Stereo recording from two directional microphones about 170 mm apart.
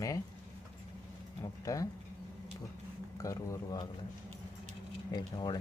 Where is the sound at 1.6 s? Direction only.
20° left (ahead or behind).